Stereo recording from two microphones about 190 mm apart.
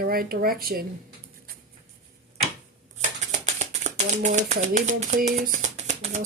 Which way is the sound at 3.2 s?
35° right (ahead or behind).